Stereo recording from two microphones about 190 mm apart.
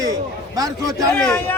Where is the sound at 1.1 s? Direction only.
5° left (ahead or behind).